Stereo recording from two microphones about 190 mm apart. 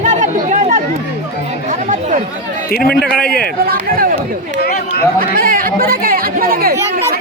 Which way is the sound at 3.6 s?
50° right (ahead or behind).